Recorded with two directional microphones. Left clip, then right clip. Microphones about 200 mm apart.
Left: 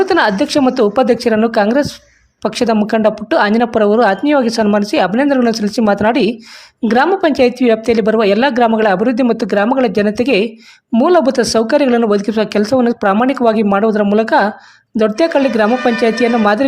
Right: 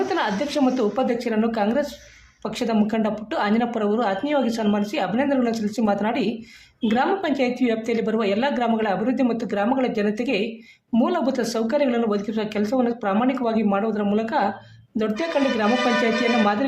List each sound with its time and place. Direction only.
0.1 s speech: 45° left (ahead or behind)